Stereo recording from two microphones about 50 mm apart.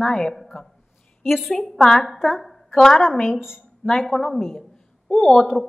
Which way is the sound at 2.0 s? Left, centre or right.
Centre.